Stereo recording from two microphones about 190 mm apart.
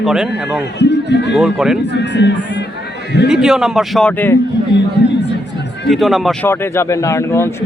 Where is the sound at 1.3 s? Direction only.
Centre (ahead or behind).